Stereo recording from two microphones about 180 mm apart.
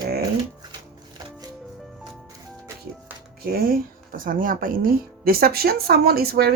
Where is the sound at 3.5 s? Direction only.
55° right (ahead or behind).